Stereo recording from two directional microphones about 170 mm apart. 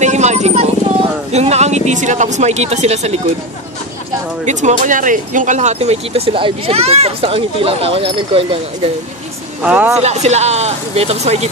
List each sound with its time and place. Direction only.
0.0 s music: 40° right (ahead or behind)
1.3 s speech: 40° right (ahead or behind)
4.5 s speech: 45° right (ahead or behind)
9.6 s speech: 5° right (ahead or behind)
10.0 s speech: 40° right (ahead or behind)